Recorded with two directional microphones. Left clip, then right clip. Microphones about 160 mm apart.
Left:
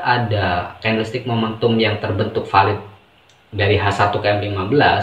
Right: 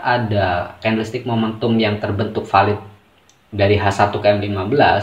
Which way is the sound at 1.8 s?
55° right (ahead or behind).